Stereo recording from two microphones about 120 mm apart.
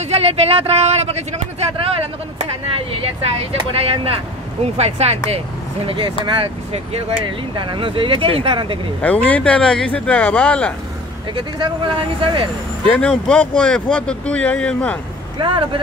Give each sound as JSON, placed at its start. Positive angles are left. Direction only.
{"t": 0.0, "sound": "speech", "side_deg": -60}
{"t": 2.3, "sound": "speech", "side_deg": -50}
{"t": 5.9, "sound": "speech", "side_deg": -45}
{"t": 9.0, "sound": "speech", "side_deg": 10}
{"t": 11.3, "sound": "speech", "side_deg": -45}
{"t": 12.8, "sound": "speech", "side_deg": 10}
{"t": 15.4, "sound": "speech", "side_deg": -45}